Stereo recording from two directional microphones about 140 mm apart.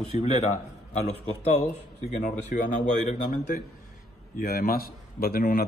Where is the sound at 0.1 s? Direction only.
50° left (ahead or behind).